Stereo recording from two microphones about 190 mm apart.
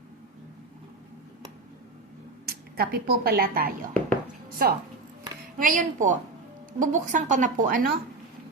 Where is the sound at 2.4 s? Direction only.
55° right (ahead or behind).